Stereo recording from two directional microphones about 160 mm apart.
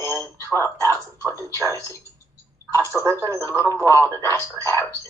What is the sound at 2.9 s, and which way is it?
Speech, 15° left (ahead or behind).